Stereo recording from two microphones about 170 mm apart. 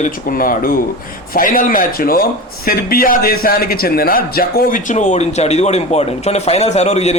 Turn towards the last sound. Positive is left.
turn(degrees=40)  # may be behind; listen again after turning